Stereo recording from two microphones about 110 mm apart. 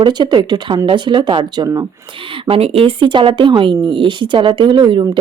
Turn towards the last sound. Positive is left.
turn(degrees=-45)  # may be behind; listen again after turning